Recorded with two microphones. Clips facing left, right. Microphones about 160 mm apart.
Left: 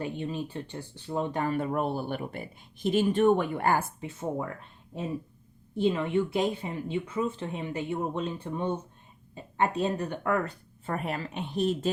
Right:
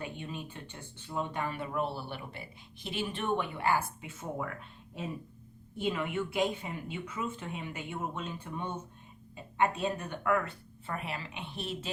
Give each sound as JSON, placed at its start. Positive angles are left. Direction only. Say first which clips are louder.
{"t": 0.0, "sound": "speech", "louder": "left 7 dB", "side_deg": 35}
{"t": 4.0, "sound": "speech", "louder": "left 6 dB", "side_deg": 30}
{"t": 5.7, "sound": "speech", "louder": "left 7 dB", "side_deg": 30}